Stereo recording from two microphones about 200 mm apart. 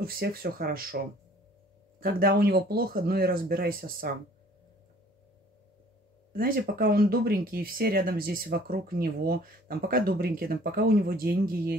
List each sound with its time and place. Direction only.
0.0 s speech: 50° right (ahead or behind)
6.3 s speech: 45° right (ahead or behind)